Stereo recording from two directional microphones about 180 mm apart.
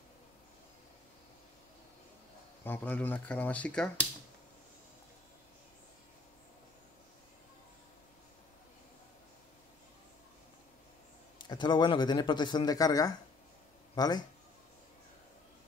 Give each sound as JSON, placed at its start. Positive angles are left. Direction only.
{"t": 2.6, "sound": "speech", "side_deg": 10}
{"t": 11.3, "sound": "a man's voice", "side_deg": 25}